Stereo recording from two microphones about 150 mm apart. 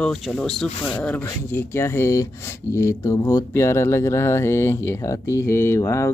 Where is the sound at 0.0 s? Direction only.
5° left (ahead or behind).